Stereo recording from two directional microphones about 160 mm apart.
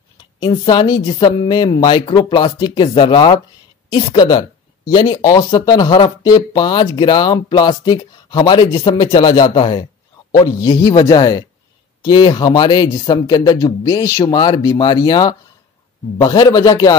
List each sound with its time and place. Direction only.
0.4 s speech: 30° left (ahead or behind)